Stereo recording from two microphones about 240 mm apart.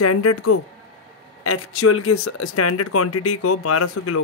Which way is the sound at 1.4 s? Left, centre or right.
Left.